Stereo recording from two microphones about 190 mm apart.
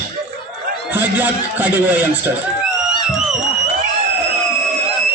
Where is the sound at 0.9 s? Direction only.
10° right (ahead or behind).